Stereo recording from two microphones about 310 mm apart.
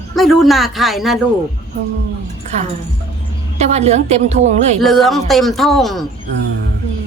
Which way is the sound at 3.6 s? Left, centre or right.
Right.